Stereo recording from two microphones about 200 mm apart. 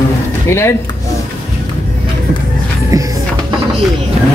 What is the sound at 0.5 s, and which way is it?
Speech, 15° left (ahead or behind).